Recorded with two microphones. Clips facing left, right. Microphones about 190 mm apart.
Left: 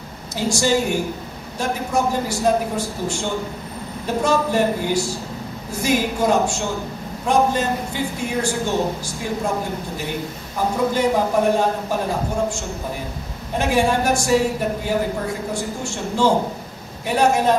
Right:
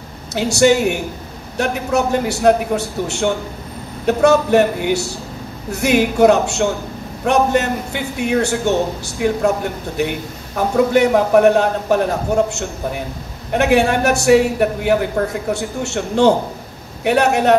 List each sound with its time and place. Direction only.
0.3 s a man's voice: 70° right (ahead or behind)